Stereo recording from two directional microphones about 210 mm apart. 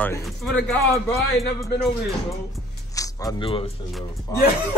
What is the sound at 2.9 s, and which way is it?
Speech, 15° left (ahead or behind).